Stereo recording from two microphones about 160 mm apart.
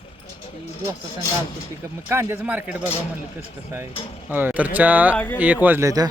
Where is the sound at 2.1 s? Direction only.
15° right (ahead or behind).